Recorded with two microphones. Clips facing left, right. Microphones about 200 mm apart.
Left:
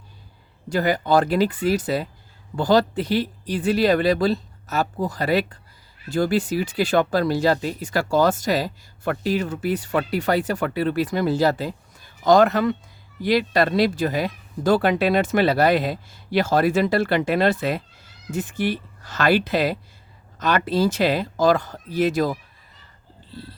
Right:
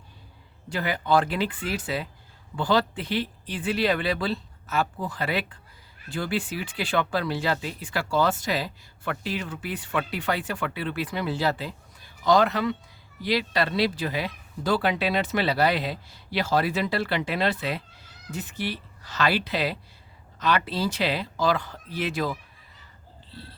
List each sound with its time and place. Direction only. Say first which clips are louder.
0.7 s speech: left 5 dB; 40° left (ahead or behind)